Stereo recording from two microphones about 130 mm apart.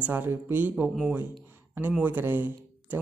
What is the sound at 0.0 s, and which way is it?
Speech, 15° right (ahead or behind).